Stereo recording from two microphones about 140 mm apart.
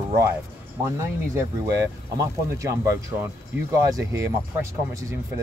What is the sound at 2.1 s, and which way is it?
Speech, 25° right (ahead or behind).